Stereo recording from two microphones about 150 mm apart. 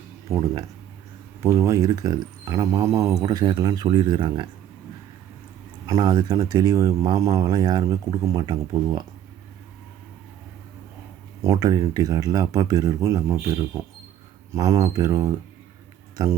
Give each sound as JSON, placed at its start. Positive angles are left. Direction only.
{"t": 0.3, "sound": "speech", "side_deg": -20}
{"t": 5.8, "sound": "speech", "side_deg": -25}
{"t": 11.4, "sound": "speech", "side_deg": -20}